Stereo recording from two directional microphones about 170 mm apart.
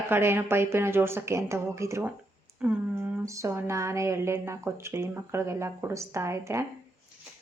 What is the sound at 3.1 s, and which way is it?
A woman's voice, 15° right (ahead or behind).